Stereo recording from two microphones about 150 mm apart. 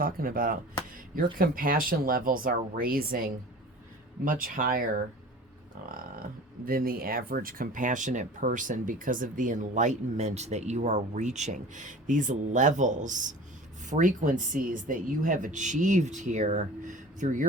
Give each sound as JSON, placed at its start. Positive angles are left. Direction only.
{"t": 0.0, "sound": "speech", "side_deg": -70}
{"t": 6.7, "sound": "speech", "side_deg": -75}